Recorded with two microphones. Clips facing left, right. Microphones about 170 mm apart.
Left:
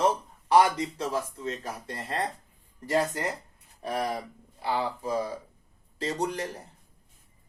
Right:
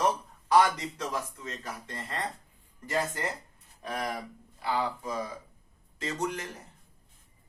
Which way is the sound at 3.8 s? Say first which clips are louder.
Left 4 dB; 30° left (ahead or behind).